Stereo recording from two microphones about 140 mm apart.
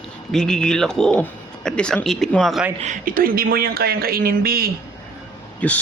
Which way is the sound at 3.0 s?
90° right.